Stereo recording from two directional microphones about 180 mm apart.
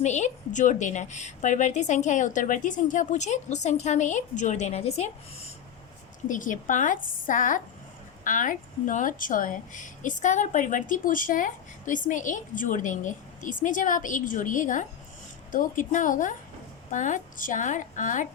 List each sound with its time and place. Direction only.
0.0 s a woman's voice: 40° left (ahead or behind)
6.2 s a woman's voice: 45° left (ahead or behind)